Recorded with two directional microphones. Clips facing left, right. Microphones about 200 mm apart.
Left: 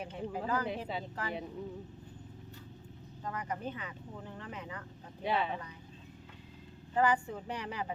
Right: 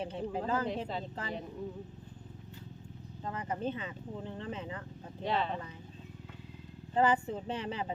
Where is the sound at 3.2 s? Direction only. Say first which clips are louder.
Right 3 dB; 25° right (ahead or behind).